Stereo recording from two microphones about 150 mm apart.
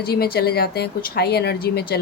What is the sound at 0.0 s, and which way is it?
Speech, 90° left.